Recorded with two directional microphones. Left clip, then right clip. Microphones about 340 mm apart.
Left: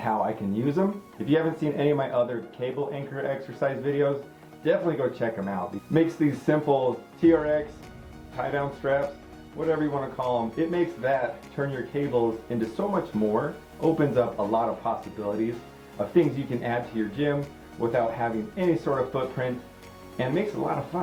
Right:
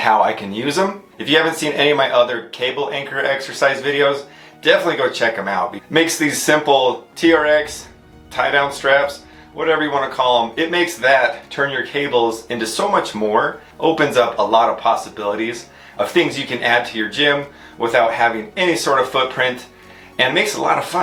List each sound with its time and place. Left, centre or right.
0.0 s speech: centre
6.7 s speech: right
7.2 s speech: centre
12.1 s speech: right
12.5 s speech: centre